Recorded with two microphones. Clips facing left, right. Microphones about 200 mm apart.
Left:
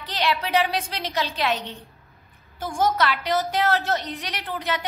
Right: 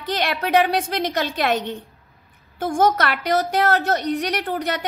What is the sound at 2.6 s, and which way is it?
Speech, 55° right (ahead or behind).